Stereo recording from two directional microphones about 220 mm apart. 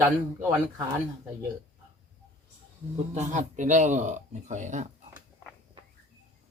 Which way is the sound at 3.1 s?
30° right (ahead or behind).